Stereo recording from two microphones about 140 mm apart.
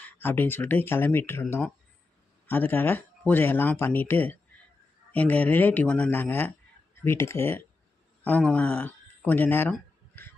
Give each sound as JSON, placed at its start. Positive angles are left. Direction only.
{"t": 0.2, "sound": "speech", "side_deg": 15}